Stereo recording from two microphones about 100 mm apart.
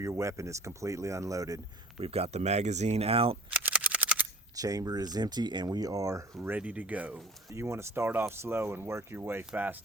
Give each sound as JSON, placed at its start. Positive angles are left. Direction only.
{"t": 0.0, "sound": "speech", "side_deg": -30}
{"t": 2.0, "sound": "speech", "side_deg": -80}
{"t": 3.6, "sound": "a sound", "side_deg": -15}
{"t": 4.5, "sound": "speech", "side_deg": -35}
{"t": 6.4, "sound": "speech", "side_deg": -15}
{"t": 7.5, "sound": "speech", "side_deg": -30}